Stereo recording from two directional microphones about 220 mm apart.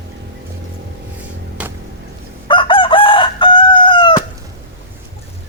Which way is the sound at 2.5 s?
20° left (ahead or behind).